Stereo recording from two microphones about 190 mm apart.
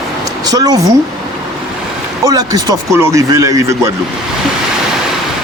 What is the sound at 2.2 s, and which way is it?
Speech, 20° right (ahead or behind).